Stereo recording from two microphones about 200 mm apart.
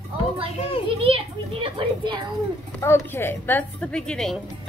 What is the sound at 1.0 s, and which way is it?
A child's voice, 30° right (ahead or behind).